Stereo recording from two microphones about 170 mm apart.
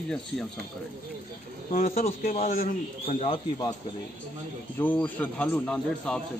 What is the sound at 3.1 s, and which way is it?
Speech, 35° left (ahead or behind).